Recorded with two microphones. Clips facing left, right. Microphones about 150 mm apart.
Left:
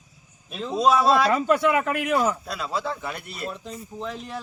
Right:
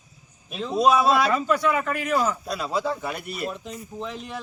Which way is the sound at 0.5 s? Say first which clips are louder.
Right 1 dB; 5° right (ahead or behind).